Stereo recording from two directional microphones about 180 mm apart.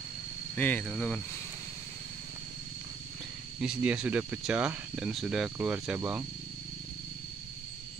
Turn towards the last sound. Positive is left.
turn(degrees=-5)  # may be behind; listen again after turning